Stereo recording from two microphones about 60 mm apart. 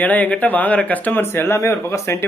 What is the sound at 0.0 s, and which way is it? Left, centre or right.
A man's voice, left.